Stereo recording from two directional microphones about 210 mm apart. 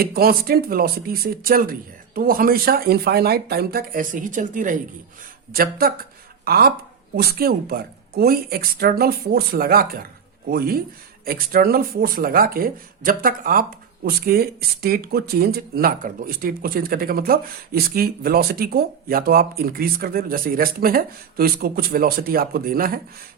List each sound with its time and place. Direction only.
0.0 s speech: 45° right (ahead or behind)